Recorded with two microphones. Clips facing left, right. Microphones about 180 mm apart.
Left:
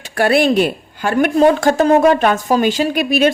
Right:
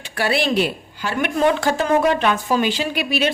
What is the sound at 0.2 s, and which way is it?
Speech, 50° left (ahead or behind).